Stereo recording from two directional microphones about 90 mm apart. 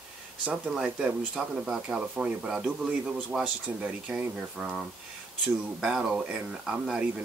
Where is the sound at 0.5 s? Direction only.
10° right (ahead or behind).